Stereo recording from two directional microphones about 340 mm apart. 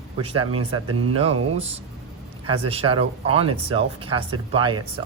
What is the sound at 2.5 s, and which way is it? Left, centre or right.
Speech, centre.